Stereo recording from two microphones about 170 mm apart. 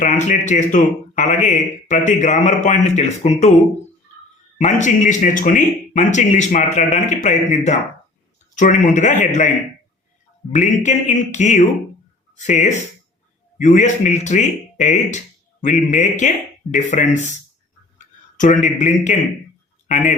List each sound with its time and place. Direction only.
0.0 s speech: 45° left (ahead or behind)
4.5 s speech: 45° left (ahead or behind)
10.5 s speech: 45° left (ahead or behind)
17.9 s a sound: 45° left (ahead or behind)